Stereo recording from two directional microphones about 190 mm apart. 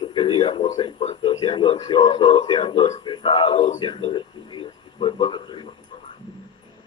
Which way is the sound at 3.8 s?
25° left (ahead or behind).